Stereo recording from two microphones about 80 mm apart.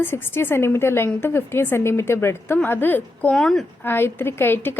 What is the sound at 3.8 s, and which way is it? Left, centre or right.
Speech, left.